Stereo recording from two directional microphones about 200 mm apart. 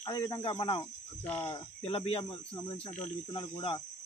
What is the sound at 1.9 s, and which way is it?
Speech, 25° left (ahead or behind).